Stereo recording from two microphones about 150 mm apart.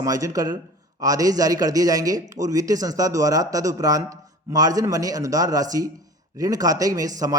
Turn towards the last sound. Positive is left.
turn(degrees=-25)  # may be behind; listen again after turning